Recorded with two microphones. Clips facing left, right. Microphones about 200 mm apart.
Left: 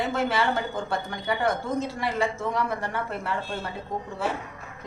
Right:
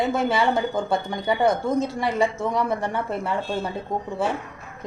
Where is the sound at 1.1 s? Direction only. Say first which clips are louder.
Right 5 dB; 15° right (ahead or behind).